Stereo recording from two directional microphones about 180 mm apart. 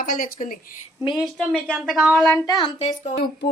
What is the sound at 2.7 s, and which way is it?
Speech, 40° left (ahead or behind).